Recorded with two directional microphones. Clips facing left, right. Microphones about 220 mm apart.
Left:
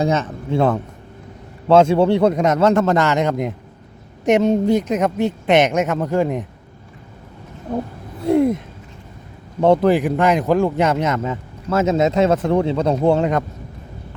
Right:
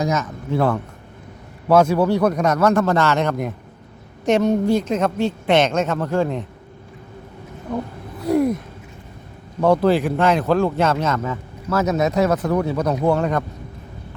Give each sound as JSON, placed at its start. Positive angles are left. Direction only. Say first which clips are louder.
{"t": 0.0, "sound": "speech", "louder": "left 3 dB", "side_deg": 30}
{"t": 7.7, "sound": "speech", "louder": "left 2 dB", "side_deg": 30}
{"t": 8.2, "sound": "a sound", "louder": "left 2 dB", "side_deg": 25}
{"t": 9.6, "sound": "speech", "louder": "left 2 dB", "side_deg": 25}